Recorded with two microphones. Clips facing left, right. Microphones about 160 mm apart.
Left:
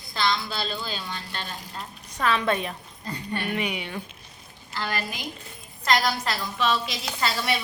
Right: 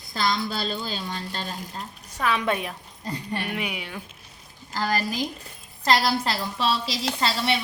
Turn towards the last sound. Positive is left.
turn(degrees=-30)  # may be behind; listen again after turning